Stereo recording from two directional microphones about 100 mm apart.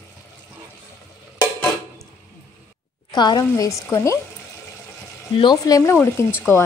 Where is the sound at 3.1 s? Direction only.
45° left (ahead or behind).